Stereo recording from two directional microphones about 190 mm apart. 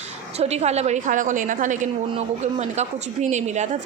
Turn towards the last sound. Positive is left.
turn(degrees=-40)  # may be behind; listen again after turning